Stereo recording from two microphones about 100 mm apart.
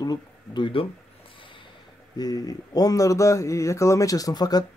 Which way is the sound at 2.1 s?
40° left (ahead or behind).